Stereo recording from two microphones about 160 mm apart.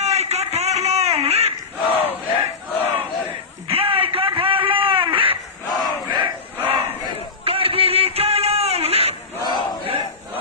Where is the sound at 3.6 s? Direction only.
35° right (ahead or behind).